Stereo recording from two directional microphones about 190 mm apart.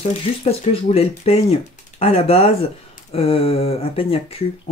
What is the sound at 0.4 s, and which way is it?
Speech, 35° left (ahead or behind).